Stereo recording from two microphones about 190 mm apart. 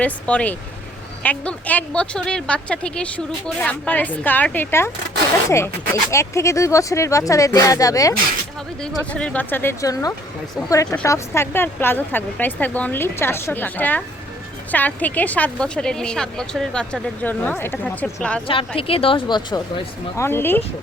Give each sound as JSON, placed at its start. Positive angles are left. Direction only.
{"t": 0.0, "sound": "speech", "side_deg": 5}
{"t": 9.1, "sound": "a woman's voice", "side_deg": 5}
{"t": 18.8, "sound": "a woman's voice", "side_deg": 30}